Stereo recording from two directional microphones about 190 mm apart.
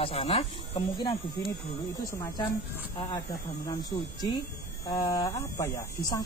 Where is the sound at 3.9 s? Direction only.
20° left (ahead or behind).